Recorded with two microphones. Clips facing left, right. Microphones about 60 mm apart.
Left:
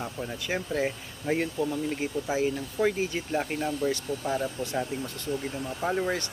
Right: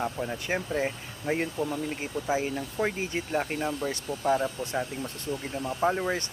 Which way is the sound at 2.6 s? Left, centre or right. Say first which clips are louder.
Left 3 dB; centre.